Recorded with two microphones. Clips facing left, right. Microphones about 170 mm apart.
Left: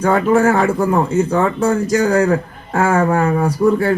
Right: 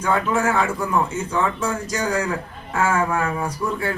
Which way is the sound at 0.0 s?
50° left (ahead or behind).